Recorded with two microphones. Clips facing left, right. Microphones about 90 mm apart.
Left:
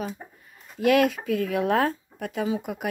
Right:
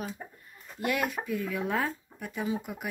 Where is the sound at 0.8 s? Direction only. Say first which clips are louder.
Left 10 dB; 90° left.